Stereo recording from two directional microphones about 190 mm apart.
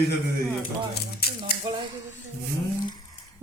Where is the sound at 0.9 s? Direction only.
55° left (ahead or behind).